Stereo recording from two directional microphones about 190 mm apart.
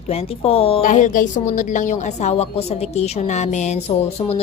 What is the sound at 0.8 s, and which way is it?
A woman's voice, 40° left (ahead or behind).